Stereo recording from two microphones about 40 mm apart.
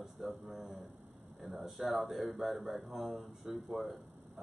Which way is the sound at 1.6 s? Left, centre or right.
Centre.